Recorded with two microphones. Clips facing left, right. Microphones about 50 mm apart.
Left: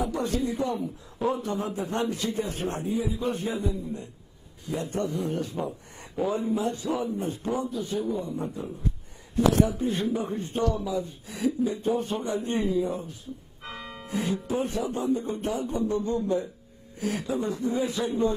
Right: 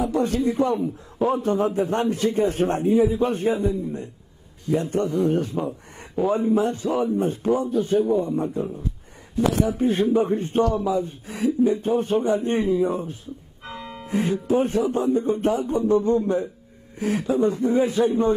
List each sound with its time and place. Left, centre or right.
0.0 s a man's voice: right
9.8 s speech: right
10.1 s a man's voice: right